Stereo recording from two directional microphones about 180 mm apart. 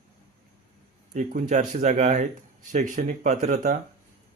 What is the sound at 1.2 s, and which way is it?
Speech, 45° right (ahead or behind).